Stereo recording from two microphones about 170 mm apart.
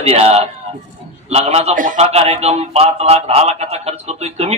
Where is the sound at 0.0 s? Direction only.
35° right (ahead or behind).